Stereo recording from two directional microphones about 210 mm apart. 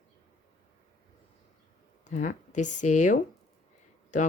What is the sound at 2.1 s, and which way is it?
A woman's voice, 35° left (ahead or behind).